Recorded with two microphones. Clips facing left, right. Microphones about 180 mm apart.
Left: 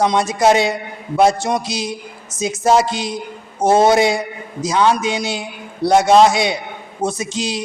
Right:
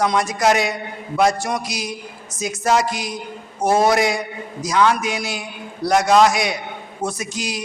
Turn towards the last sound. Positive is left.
turn(degrees=25)  # may be behind; listen again after turning